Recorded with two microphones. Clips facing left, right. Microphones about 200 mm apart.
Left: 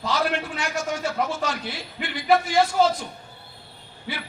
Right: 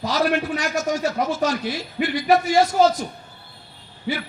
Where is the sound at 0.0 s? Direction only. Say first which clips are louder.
Right 4 dB; 40° right (ahead or behind).